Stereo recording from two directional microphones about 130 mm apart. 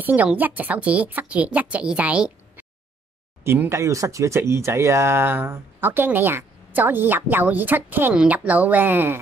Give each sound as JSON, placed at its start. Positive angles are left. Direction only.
{"t": 0.0, "sound": "speech", "side_deg": -10}